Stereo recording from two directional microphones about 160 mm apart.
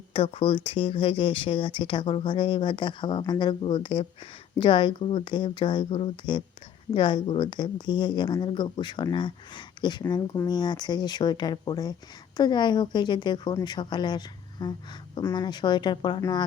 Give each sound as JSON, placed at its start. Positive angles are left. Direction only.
{"t": 0.1, "sound": "speech", "side_deg": 35}